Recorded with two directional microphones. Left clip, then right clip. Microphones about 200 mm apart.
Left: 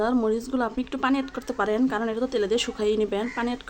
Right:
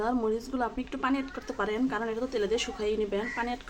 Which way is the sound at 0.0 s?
25° left (ahead or behind).